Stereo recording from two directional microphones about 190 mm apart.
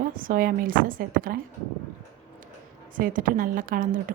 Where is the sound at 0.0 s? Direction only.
45° right (ahead or behind).